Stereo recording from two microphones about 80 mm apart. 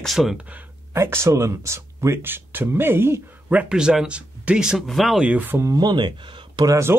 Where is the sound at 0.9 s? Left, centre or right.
Right.